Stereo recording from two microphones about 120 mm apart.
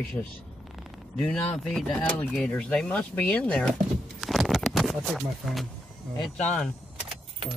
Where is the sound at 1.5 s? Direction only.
5° left (ahead or behind).